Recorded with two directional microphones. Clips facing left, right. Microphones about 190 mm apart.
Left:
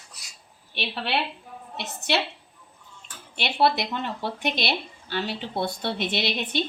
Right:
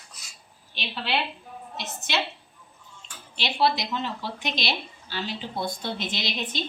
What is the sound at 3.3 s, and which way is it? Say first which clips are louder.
Speech: left 2 dB; 55° left (ahead or behind).